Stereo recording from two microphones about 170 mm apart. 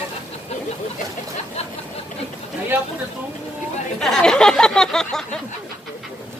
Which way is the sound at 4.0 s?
Centre (ahead or behind).